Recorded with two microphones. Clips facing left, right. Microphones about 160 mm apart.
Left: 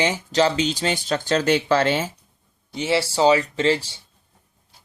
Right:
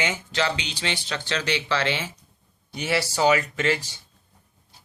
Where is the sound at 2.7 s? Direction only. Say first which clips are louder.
Left 4 dB; 25° left (ahead or behind).